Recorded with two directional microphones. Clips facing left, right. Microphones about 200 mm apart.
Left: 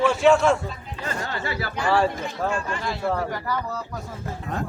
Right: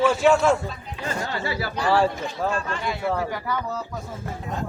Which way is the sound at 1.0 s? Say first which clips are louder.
Right 2 dB; 15° right (ahead or behind).